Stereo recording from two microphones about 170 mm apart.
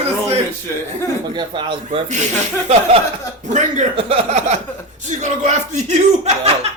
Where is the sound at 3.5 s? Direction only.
40° right (ahead or behind).